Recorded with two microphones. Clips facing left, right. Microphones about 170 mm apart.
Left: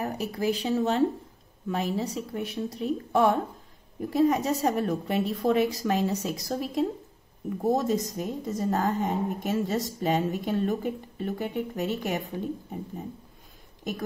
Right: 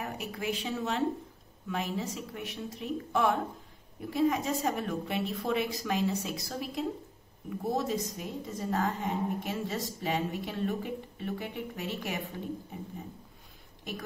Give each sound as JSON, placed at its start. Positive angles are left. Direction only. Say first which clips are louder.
{"t": 0.0, "sound": "a woman's voice", "louder": "left 7 dB", "side_deg": 35}